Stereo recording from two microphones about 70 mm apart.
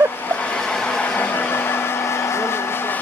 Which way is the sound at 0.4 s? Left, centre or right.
Centre.